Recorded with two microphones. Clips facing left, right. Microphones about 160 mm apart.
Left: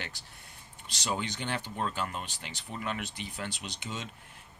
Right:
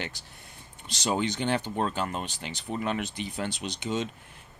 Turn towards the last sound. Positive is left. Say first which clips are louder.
# right 9 dB
turn(degrees=-25)  # may be behind; listen again after turning